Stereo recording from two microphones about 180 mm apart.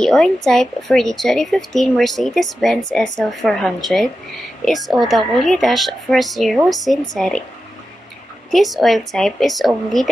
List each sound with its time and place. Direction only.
0.0 s a woman's voice: 5° left (ahead or behind)
8.5 s a woman's voice: centre (ahead or behind)